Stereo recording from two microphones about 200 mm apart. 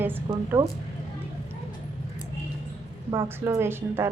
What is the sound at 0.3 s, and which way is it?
Speech, 15° right (ahead or behind).